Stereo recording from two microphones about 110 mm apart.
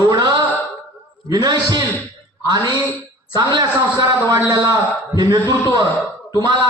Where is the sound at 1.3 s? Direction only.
40° right (ahead or behind).